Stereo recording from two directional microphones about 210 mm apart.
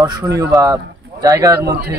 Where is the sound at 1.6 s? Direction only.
50° right (ahead or behind).